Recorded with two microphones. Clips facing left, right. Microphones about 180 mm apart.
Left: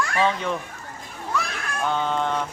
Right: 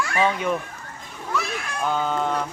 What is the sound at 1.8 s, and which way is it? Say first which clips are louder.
Speech: even; 5° right (ahead or behind).